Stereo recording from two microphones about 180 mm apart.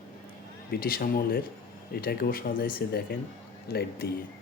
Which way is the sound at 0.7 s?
55° left (ahead or behind).